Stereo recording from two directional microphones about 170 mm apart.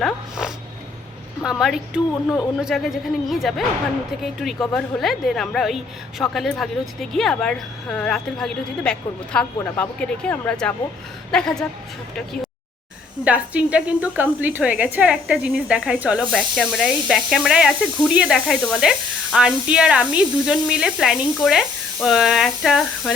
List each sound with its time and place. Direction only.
0.0 s speech: 5° right (ahead or behind)
13.2 s a woman's voice: 10° right (ahead or behind)